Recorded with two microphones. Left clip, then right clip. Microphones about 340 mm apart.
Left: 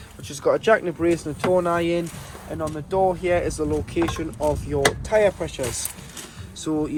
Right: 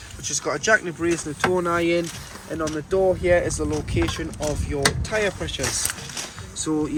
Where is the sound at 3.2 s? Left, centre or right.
Centre.